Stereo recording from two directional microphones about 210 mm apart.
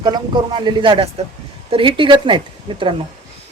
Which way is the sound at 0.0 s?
20° right (ahead or behind).